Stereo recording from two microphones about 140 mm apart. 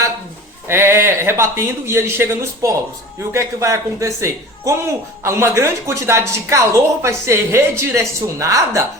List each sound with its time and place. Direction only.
0.7 s a woman's voice: 20° right (ahead or behind)